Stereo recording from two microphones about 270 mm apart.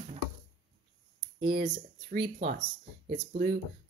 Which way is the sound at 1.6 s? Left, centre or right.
Right.